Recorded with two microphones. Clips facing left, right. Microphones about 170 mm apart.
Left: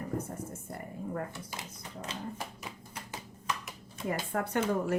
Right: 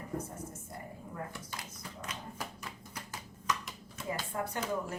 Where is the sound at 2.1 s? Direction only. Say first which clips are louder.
Left 8 dB; 30° left (ahead or behind).